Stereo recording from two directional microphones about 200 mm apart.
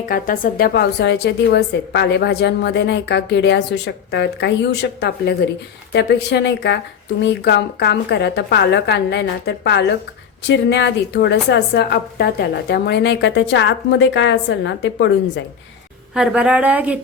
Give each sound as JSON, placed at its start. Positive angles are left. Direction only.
{"t": 0.1, "sound": "a woman's voice", "side_deg": 45}
{"t": 16.1, "sound": "a woman's voice", "side_deg": -5}